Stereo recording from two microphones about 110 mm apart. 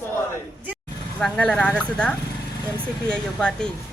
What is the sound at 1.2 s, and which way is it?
Speech, 10° left (ahead or behind).